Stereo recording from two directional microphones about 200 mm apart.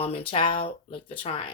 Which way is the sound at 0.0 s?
30° left (ahead or behind).